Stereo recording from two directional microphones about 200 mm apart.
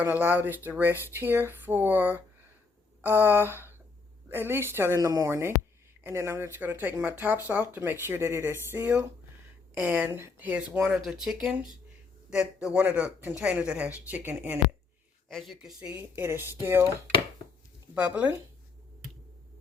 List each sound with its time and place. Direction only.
0.0 s speech: 10° right (ahead or behind)
17.9 s speech: 5° right (ahead or behind)